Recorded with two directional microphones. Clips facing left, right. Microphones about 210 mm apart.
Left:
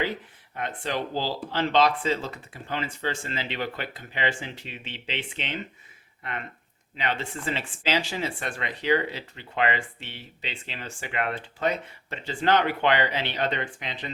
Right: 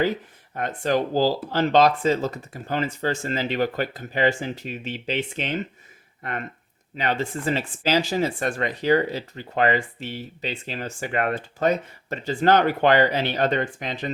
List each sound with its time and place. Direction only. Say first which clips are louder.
0.5 s speech: right 7 dB; 45° right (ahead or behind)